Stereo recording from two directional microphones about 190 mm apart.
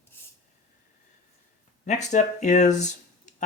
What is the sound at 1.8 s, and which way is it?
Speech, 40° left (ahead or behind).